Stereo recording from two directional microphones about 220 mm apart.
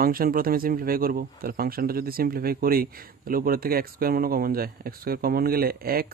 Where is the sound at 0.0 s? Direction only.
40° right (ahead or behind).